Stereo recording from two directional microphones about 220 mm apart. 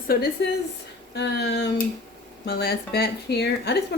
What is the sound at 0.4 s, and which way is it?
Speech, 50° left (ahead or behind).